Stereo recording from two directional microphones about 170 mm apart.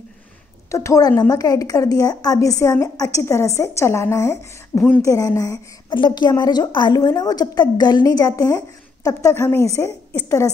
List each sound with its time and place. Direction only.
0.7 s a woman's voice: 20° left (ahead or behind)